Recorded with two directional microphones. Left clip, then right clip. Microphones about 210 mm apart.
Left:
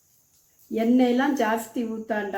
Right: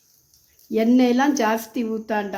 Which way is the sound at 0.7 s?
55° right (ahead or behind).